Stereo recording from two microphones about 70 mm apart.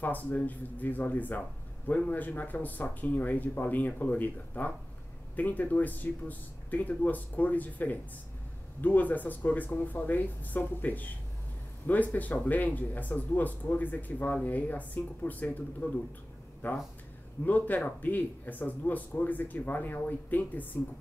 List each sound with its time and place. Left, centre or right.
0.0 s speech: left